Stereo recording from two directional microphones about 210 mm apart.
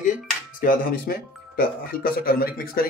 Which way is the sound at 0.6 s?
40° left (ahead or behind).